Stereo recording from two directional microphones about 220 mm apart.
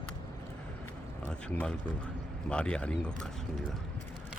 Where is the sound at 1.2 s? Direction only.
5° left (ahead or behind).